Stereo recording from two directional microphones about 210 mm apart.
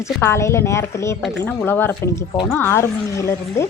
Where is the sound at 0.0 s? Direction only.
10° left (ahead or behind).